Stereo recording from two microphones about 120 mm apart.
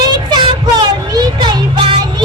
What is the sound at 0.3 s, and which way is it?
Child singing, 40° right (ahead or behind).